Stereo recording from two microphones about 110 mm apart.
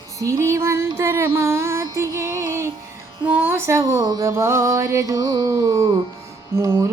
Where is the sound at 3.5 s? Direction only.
25° right (ahead or behind).